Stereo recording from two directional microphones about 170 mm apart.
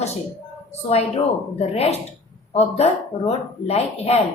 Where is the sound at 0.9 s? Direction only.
35° left (ahead or behind).